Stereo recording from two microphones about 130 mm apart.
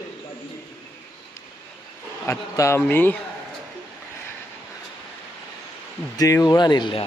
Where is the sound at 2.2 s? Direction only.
20° left (ahead or behind).